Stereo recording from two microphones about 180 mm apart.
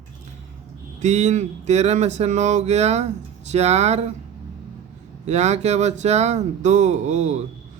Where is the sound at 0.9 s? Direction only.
40° right (ahead or behind).